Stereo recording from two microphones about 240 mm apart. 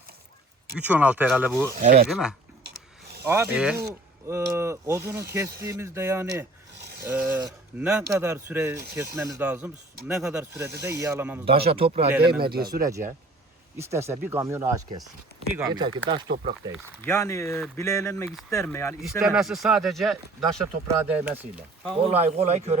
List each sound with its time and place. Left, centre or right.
0.8 s speech: centre
1.7 s speech: right
2.0 s speech: centre
2.6 s a sound: right
3.2 s speech: centre
6.8 s a sound: right
7.1 s speech: centre
11.7 s speech: right
12.4 s speech: right
13.7 s speech: centre
17.1 s speech: centre
19.2 s speech: centre
22.0 s speech: right